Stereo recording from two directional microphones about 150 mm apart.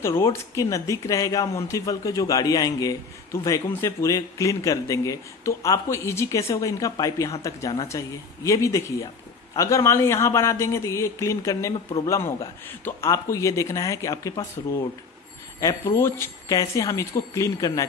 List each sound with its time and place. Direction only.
0.0 s speech: 20° left (ahead or behind)
15.6 s speech: 15° left (ahead or behind)